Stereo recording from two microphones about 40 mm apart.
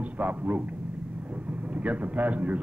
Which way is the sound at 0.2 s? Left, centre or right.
Right.